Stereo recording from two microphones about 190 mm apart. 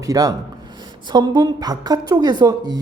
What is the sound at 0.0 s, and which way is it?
Speech, 20° right (ahead or behind).